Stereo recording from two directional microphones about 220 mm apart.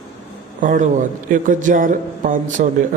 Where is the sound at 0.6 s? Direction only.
35° right (ahead or behind).